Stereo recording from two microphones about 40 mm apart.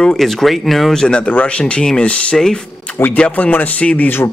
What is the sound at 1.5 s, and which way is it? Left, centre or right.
Speech, left.